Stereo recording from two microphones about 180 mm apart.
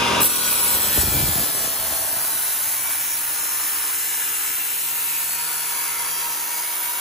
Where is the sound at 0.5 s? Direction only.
Centre (ahead or behind).